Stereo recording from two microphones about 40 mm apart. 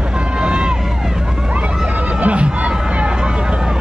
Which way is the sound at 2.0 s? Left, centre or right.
Right.